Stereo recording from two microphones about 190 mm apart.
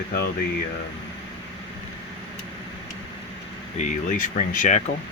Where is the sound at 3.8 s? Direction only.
45° left (ahead or behind).